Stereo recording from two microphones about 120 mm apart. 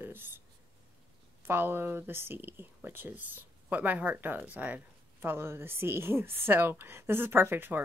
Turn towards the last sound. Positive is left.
turn(degrees=-15)  # may be behind; listen again after turning